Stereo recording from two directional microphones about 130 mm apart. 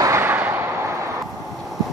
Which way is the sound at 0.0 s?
20° right (ahead or behind).